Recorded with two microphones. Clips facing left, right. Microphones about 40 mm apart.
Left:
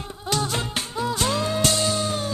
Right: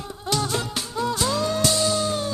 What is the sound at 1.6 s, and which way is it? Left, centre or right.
Music, left.